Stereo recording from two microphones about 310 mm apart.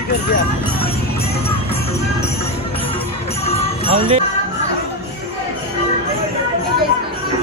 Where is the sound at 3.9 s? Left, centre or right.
Centre.